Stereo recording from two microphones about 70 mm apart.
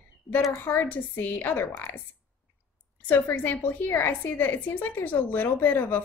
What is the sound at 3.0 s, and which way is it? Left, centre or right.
A woman's voice, left.